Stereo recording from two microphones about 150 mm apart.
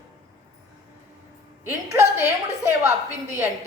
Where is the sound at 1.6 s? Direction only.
15° right (ahead or behind).